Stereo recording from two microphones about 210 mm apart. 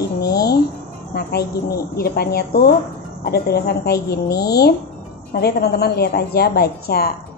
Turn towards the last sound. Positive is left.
turn(degrees=50)  # may be behind; listen again after turning